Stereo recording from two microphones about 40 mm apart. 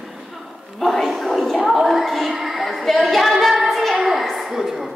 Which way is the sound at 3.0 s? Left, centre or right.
Centre.